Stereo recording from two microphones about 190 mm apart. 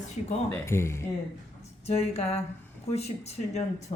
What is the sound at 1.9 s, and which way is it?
Speech, 35° left (ahead or behind).